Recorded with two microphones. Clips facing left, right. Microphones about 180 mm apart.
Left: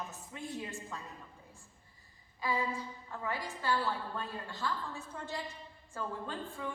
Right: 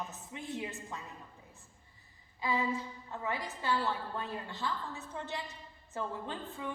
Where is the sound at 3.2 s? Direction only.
20° right (ahead or behind).